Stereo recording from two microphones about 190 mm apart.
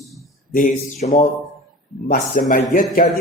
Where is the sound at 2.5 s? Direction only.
45° left (ahead or behind).